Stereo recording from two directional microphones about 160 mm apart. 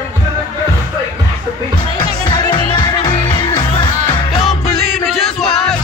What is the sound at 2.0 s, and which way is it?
Music, 30° left (ahead or behind).